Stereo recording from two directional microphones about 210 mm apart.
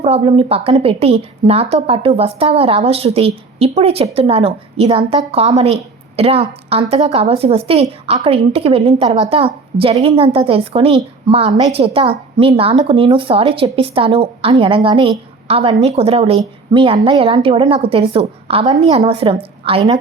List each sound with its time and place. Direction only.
0.0 s a woman's voice: 25° right (ahead or behind)